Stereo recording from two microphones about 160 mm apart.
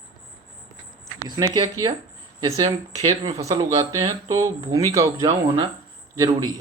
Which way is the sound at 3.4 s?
20° right (ahead or behind).